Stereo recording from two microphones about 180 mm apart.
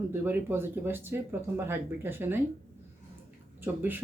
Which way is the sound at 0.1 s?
10° right (ahead or behind).